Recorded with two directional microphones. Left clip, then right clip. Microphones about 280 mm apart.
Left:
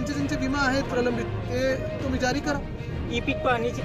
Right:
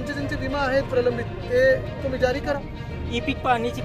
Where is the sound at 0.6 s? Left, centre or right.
Centre.